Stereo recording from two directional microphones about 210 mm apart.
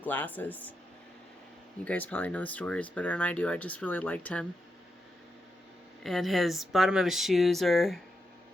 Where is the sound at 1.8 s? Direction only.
5° left (ahead or behind).